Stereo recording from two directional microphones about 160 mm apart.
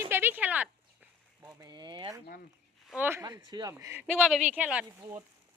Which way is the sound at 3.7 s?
15° right (ahead or behind).